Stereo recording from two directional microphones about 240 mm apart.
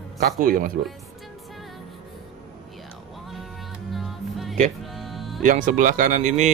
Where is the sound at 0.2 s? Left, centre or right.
Right.